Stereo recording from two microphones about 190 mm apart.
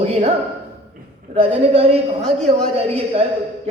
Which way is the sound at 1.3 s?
30° right (ahead or behind).